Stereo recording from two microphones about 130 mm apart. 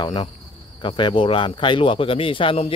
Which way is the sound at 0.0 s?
40° left (ahead or behind).